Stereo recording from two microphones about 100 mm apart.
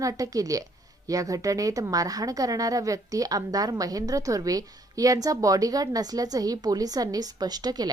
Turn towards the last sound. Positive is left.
turn(degrees=-40)  # may be behind; listen again after turning